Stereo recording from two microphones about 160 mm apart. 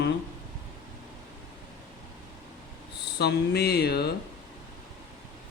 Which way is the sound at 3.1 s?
90° left.